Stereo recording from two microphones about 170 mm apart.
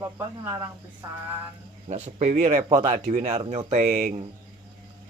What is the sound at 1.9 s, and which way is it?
Speech, 45° right (ahead or behind).